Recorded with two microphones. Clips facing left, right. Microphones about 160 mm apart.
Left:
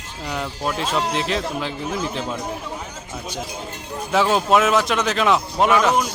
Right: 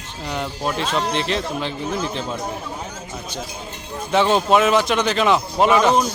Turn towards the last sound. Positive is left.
turn(degrees=0)  # may be behind; listen again after turning